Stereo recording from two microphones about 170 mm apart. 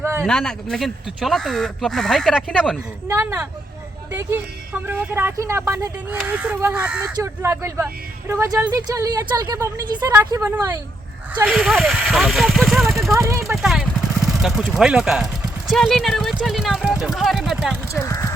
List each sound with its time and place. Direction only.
0.0 s a sound: 15° right (ahead or behind)
0.3 s speech: 5° left (ahead or behind)
3.1 s speech: 15° right (ahead or behind)
11.4 s speech: centre (ahead or behind)
13.1 s speech: 15° right (ahead or behind)
13.5 s speech: 5° right (ahead or behind)
18.0 s speech: 15° left (ahead or behind)